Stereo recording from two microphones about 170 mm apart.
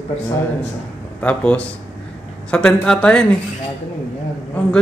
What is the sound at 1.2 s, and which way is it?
Speech, 5° left (ahead or behind).